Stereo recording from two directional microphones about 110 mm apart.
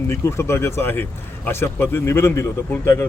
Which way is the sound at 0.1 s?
25° left (ahead or behind).